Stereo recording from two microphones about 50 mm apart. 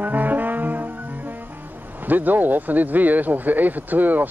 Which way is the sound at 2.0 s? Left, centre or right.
Right.